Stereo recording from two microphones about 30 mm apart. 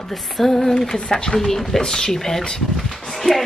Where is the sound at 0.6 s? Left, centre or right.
Centre.